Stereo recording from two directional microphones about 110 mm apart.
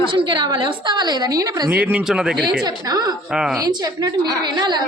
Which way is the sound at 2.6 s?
35° right (ahead or behind).